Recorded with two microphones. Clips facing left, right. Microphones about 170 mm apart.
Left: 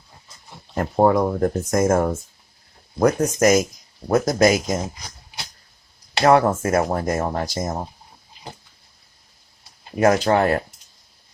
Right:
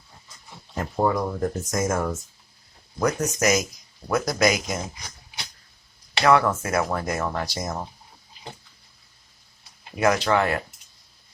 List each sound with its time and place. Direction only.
0.8 s speech: 55° left (ahead or behind)
6.1 s speech: 45° left (ahead or behind)
10.0 s speech: 40° left (ahead or behind)